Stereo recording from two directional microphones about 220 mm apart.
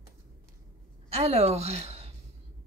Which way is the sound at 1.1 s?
30° right (ahead or behind).